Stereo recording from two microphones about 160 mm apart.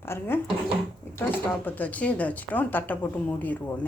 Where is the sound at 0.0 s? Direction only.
15° left (ahead or behind).